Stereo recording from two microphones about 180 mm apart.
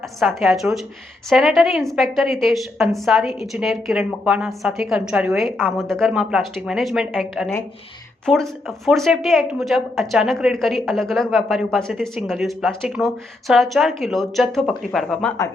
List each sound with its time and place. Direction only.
0.2 s a woman's voice: centre (ahead or behind)